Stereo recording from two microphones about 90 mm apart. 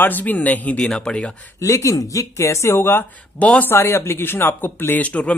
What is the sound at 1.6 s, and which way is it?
Speech, 35° left (ahead or behind).